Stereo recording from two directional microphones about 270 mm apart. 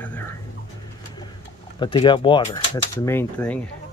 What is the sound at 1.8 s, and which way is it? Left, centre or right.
Speech, centre.